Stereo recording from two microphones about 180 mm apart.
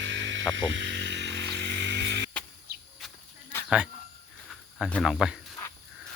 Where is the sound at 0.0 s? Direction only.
90° right; by 2.3 s 75° right (ahead or behind).